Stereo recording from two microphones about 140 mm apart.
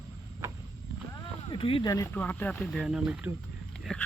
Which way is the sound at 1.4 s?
40° left (ahead or behind).